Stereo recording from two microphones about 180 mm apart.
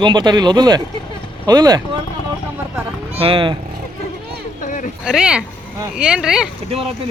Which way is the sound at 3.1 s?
30° right (ahead or behind).